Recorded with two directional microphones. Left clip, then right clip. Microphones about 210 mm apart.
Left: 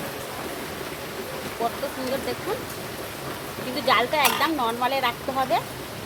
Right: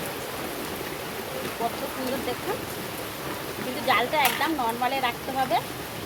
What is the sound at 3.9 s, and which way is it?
Speech, 40° left (ahead or behind).